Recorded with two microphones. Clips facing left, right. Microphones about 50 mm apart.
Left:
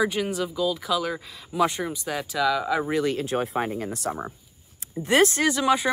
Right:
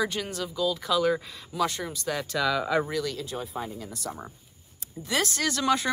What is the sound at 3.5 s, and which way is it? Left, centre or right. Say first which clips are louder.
Speech: left 8 dB; left.